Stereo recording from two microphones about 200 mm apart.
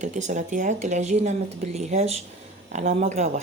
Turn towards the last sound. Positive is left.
turn(degrees=-35)  # may be behind; listen again after turning